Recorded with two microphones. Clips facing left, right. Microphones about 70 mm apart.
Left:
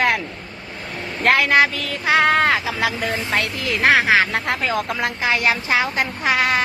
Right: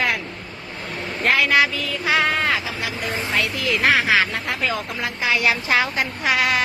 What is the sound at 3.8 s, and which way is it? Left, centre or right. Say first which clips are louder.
Speech: left 3 dB; left.